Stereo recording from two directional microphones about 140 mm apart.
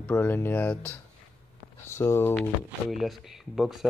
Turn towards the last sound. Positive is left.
turn(degrees=0)  # may be behind; listen again after turning